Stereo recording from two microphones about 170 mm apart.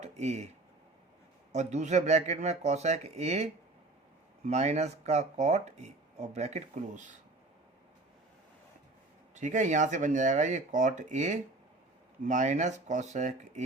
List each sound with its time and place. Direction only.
0.0 s a sound: 40° right (ahead or behind)
1.5 s speech: 40° right (ahead or behind)
9.3 s speech: 45° right (ahead or behind)